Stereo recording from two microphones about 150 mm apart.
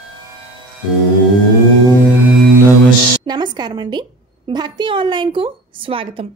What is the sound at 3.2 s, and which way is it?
A woman's voice, 30° right (ahead or behind).